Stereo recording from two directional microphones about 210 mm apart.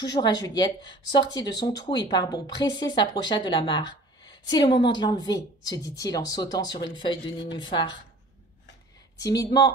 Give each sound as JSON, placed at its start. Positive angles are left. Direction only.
{"t": 0.0, "sound": "speech", "side_deg": 20}
{"t": 9.2, "sound": "speech", "side_deg": 15}